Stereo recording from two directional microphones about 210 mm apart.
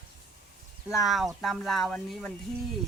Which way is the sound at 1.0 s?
Centre (ahead or behind).